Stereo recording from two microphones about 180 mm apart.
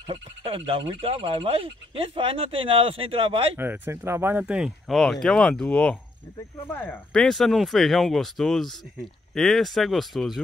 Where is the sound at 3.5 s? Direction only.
10° right (ahead or behind).